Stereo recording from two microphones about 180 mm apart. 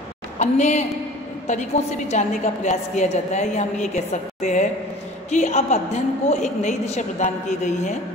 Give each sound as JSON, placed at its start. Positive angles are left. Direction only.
{"t": 0.4, "sound": "a woman's voice", "side_deg": 40}